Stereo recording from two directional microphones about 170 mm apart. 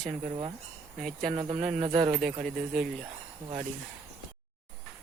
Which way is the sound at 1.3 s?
35° right (ahead or behind).